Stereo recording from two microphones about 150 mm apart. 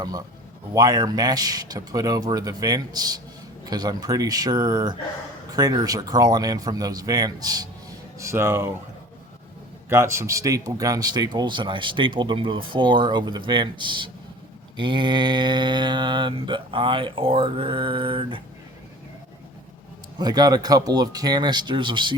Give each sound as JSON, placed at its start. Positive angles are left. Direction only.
{"t": 0.0, "sound": "speech", "side_deg": -25}
{"t": 9.9, "sound": "speech", "side_deg": -20}
{"t": 20.1, "sound": "speech", "side_deg": -25}